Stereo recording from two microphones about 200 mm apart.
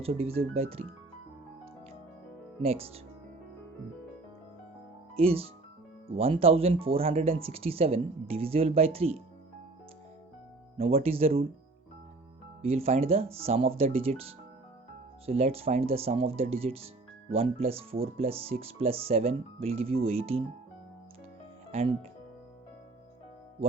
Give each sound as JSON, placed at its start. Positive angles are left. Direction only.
{"t": 0.0, "sound": "speech", "side_deg": -30}
{"t": 2.6, "sound": "speech", "side_deg": -30}
{"t": 5.1, "sound": "speech", "side_deg": -30}
{"t": 10.8, "sound": "speech", "side_deg": -30}
{"t": 12.6, "sound": "speech", "side_deg": -30}